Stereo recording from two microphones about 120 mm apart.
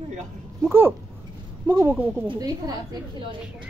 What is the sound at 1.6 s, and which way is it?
A woman's voice, 30° right (ahead or behind).